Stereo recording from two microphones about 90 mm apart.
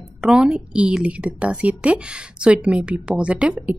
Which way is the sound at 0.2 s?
10° right (ahead or behind).